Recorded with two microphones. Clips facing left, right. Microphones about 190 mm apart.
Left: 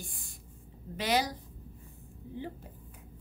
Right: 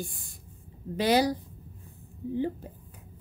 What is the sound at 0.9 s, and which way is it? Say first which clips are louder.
Speech: right 7 dB; 35° right (ahead or behind).